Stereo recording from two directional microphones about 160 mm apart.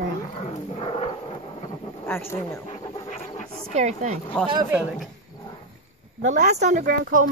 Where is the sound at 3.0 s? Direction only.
45° left (ahead or behind).